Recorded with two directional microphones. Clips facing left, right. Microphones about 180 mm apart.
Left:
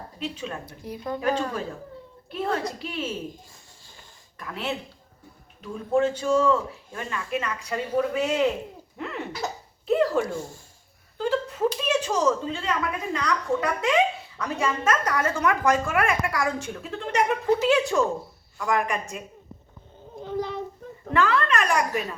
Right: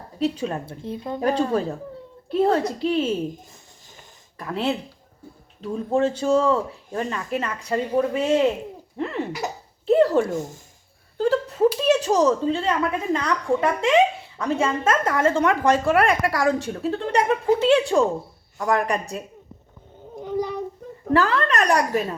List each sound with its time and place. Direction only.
0.2 s a woman's voice: 35° right (ahead or behind)
4.4 s a woman's voice: 30° right (ahead or behind)
5.9 s a woman's voice: 30° right (ahead or behind)
9.0 s a sound: 35° right (ahead or behind)
10.3 s a woman's voice: 20° right (ahead or behind)
11.2 s a sound: 35° right (ahead or behind)
11.9 s a woman's voice: 35° right (ahead or behind)
20.1 s cat: 15° right (ahead or behind)
21.1 s speech: 35° right (ahead or behind)